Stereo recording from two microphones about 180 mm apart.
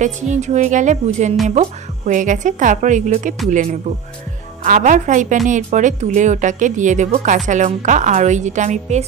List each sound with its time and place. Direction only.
0.0 s speech: 40° right (ahead or behind)
4.6 s speech: 45° right (ahead or behind)